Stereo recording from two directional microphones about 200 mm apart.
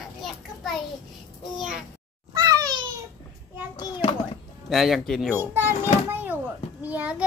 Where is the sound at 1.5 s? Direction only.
5° right (ahead or behind).